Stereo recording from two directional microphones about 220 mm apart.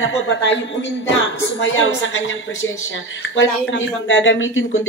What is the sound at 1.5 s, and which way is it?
Speech, 65° left (ahead or behind).